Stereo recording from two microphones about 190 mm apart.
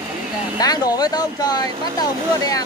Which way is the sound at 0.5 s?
20° left (ahead or behind).